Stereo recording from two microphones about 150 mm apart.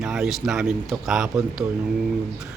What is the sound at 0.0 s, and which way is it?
Speech, 5° right (ahead or behind).